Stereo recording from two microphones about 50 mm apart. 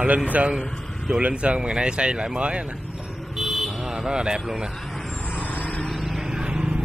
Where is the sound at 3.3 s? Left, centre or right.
Centre.